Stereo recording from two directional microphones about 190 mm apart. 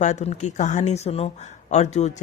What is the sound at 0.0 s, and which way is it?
Speech, 40° left (ahead or behind).